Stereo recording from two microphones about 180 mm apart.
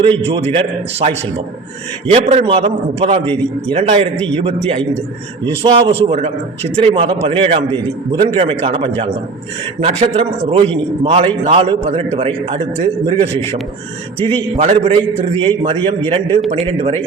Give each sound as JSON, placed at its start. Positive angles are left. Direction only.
{"t": 0.2, "sound": "a man's voice", "side_deg": -30}
{"t": 14.6, "sound": "a man's voice", "side_deg": -35}